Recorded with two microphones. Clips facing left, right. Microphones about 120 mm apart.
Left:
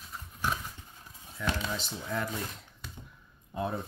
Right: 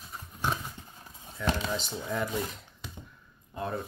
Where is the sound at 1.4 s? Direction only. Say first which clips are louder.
Right 3 dB; 5° left (ahead or behind).